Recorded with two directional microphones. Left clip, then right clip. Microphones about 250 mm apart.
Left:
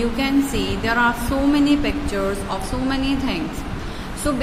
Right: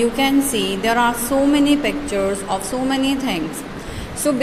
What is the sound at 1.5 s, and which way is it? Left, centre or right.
A woman's voice, centre.